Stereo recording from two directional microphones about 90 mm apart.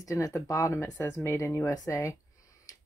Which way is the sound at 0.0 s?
35° left (ahead or behind).